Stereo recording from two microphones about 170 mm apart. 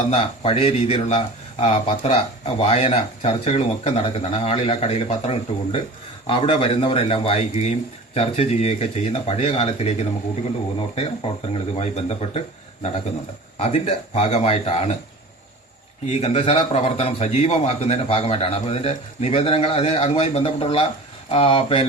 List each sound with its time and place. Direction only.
0.1 s a man's voice: 35° left (ahead or behind)
13.6 s a man's voice: 40° left (ahead or behind)
16.0 s a man's voice: 40° left (ahead or behind)